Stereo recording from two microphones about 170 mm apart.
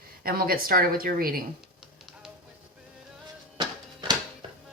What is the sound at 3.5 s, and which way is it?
Music, 25° right (ahead or behind).